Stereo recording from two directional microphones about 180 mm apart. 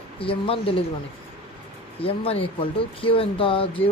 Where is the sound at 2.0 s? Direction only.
30° left (ahead or behind).